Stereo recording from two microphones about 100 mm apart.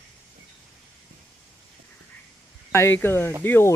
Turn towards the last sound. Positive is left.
turn(degrees=20)  # may be behind; listen again after turning